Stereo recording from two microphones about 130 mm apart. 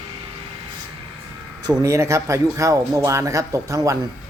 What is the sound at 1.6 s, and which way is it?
Speech, 30° right (ahead or behind).